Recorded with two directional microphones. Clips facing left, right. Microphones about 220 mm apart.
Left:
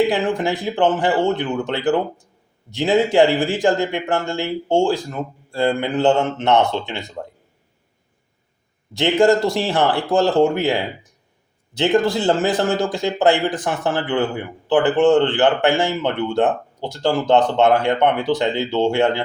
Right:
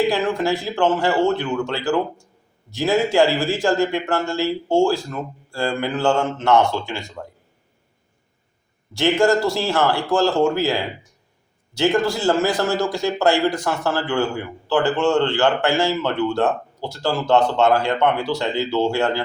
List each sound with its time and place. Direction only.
0.1 s a man's voice: 15° left (ahead or behind)
9.0 s a man's voice: 20° left (ahead or behind)